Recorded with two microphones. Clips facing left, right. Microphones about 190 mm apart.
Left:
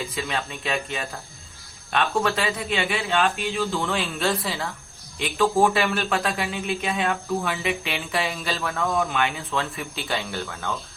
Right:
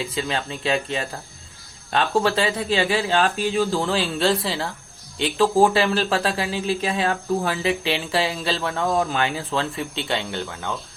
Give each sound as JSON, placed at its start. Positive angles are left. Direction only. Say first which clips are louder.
{"t": 0.1, "sound": "speech", "louder": "right 3 dB", "side_deg": -30}